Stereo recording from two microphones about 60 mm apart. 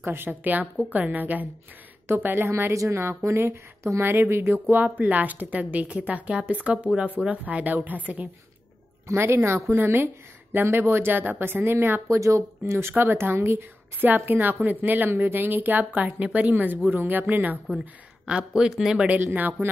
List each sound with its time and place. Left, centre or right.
0.0 s a woman's voice: right
0.3 s a woman's voice: right
4.7 s a woman's voice: right
9.0 s a woman's voice: right
12.1 s speech: right
12.7 s a woman's voice: right
18.2 s speech: centre
19.3 s a woman's voice: right